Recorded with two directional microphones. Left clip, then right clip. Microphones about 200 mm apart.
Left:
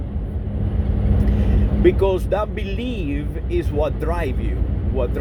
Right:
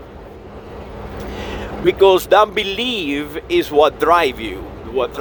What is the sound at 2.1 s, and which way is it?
Speech, 35° right (ahead or behind).